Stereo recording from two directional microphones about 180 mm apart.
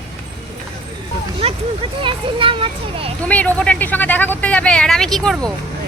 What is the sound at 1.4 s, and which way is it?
A child's voice, 35° right (ahead or behind).